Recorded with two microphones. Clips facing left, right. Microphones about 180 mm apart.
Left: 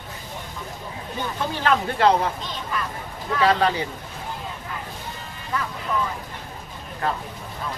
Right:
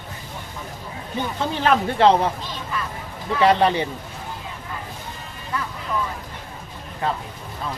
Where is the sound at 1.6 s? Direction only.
20° right (ahead or behind).